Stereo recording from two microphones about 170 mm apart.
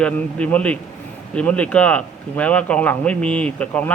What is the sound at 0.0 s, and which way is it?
Speech, 5° left (ahead or behind).